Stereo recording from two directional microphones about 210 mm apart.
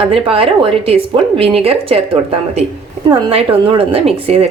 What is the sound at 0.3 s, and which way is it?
Speech, 25° right (ahead or behind).